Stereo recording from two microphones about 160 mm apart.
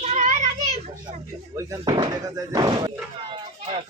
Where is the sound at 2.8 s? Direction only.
30° right (ahead or behind).